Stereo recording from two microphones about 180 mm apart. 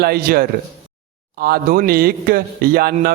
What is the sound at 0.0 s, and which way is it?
A man's voice, 60° right (ahead or behind).